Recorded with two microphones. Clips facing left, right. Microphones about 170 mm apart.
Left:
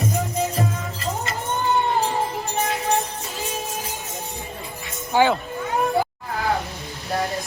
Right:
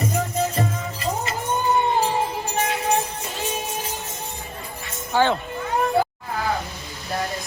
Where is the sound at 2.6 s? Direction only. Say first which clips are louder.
Even; centre (ahead or behind).